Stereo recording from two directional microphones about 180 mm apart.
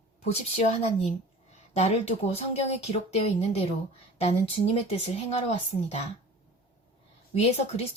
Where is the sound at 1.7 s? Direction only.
35° left (ahead or behind).